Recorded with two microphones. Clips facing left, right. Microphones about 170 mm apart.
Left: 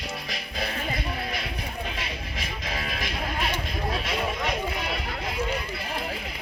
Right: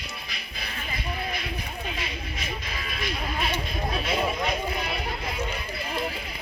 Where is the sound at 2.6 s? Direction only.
90° left.